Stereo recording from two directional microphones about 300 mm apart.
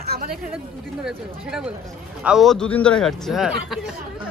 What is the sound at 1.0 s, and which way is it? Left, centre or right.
A man's voice, centre.